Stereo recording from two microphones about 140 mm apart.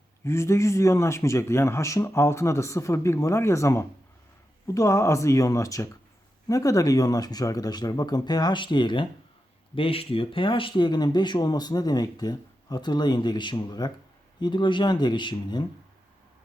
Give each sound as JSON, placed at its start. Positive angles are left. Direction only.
{"t": 0.3, "sound": "a man's voice", "side_deg": 20}